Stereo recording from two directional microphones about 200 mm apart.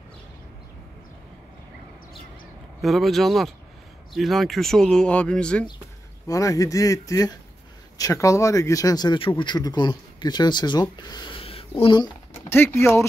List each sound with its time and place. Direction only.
2.8 s speech: centre (ahead or behind)
6.2 s speech: 15° left (ahead or behind)
12.4 s speech: 10° left (ahead or behind)